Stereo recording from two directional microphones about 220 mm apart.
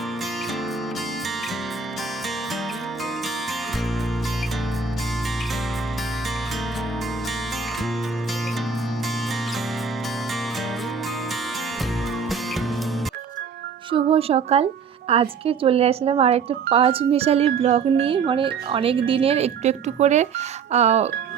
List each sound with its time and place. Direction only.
13.9 s speech: 25° right (ahead or behind)